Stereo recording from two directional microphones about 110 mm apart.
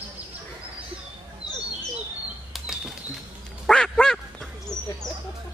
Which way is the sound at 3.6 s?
5° left (ahead or behind).